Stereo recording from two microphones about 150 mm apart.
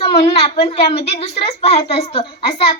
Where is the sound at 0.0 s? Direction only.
40° left (ahead or behind).